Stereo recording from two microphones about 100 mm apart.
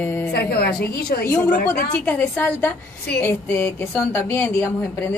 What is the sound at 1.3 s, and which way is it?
A woman's voice, 20° left (ahead or behind).